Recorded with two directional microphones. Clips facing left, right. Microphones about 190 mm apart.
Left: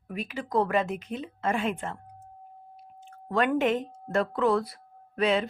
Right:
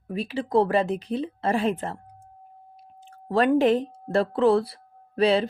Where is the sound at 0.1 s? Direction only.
30° right (ahead or behind).